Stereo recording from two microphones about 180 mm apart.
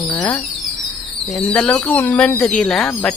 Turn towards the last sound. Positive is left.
turn(degrees=5)  # may be behind; listen again after turning